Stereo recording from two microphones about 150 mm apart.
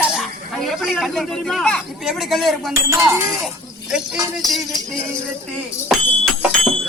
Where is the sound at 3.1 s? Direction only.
5° right (ahead or behind).